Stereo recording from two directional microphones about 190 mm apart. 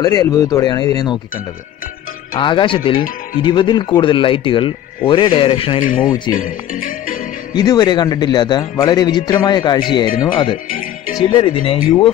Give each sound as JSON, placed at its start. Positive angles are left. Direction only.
{"t": 0.0, "sound": "speech", "side_deg": 20}
{"t": 2.3, "sound": "speech", "side_deg": 25}
{"t": 5.8, "sound": "speech", "side_deg": 45}
{"t": 7.5, "sound": "speech", "side_deg": 20}
{"t": 10.7, "sound": "music", "side_deg": 45}
{"t": 11.3, "sound": "speech", "side_deg": 30}